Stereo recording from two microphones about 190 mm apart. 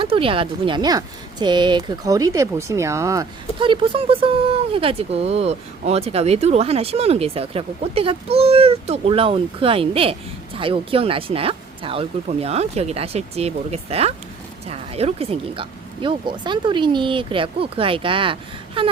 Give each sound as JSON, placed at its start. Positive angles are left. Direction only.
{"t": 0.0, "sound": "speech", "side_deg": -30}